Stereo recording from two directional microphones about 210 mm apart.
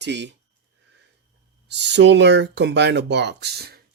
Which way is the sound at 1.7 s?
55° right (ahead or behind).